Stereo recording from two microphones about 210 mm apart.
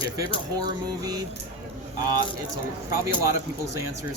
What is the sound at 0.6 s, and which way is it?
Speech, 20° right (ahead or behind).